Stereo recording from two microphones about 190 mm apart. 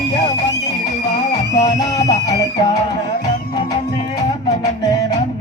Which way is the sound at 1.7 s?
20° left (ahead or behind).